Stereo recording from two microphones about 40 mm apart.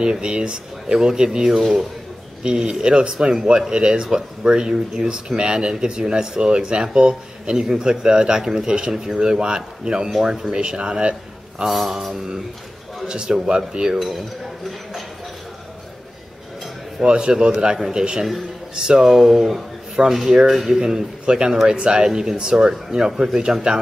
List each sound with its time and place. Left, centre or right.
0.0 s speech: right
1.6 s mantra: centre
2.4 s a man's voice: centre
11.6 s mantra: centre
11.9 s speech: centre
13.0 s speech: centre
13.9 s speech: centre
17.0 s speech: right